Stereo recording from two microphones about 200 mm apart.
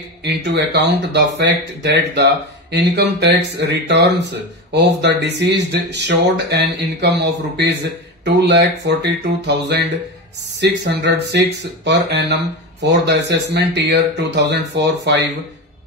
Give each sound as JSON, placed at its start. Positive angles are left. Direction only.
{"t": 0.2, "sound": "speech", "side_deg": -60}
{"t": 10.6, "sound": "speech", "side_deg": -60}